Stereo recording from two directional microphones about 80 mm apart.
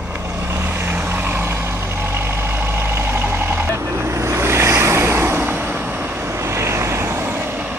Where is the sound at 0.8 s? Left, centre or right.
Right.